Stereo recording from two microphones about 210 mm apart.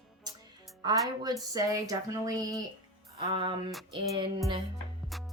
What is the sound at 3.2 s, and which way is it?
Music, 25° right (ahead or behind).